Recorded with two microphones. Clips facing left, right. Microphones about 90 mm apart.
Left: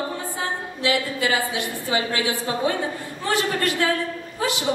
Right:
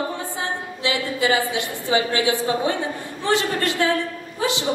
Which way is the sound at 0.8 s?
20° right (ahead or behind).